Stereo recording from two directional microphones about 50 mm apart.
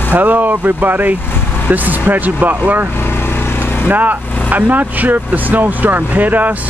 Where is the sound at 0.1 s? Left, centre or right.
Right.